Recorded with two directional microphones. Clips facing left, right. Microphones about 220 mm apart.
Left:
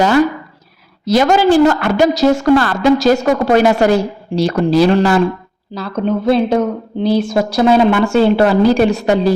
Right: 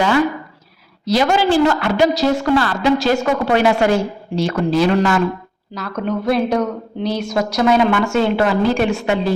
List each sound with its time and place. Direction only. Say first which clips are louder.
1.0 s a woman's voice: left 4 dB; 50° left (ahead or behind)